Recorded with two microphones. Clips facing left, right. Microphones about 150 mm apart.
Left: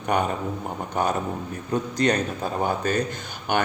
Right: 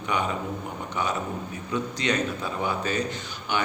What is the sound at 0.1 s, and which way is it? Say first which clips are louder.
Speech: left 3 dB; 50° left (ahead or behind).